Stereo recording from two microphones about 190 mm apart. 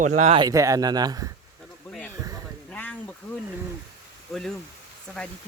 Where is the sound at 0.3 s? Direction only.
20° right (ahead or behind).